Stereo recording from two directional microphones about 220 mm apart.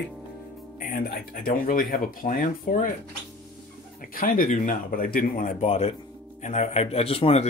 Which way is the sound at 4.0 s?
40° left (ahead or behind).